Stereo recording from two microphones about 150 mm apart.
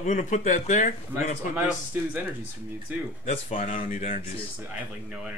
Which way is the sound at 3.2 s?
45° left (ahead or behind).